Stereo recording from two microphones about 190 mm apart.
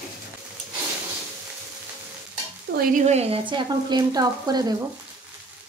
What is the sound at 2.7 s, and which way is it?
Stir, 60° right (ahead or behind).